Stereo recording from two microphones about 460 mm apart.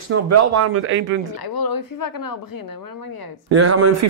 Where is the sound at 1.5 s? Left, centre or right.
Left.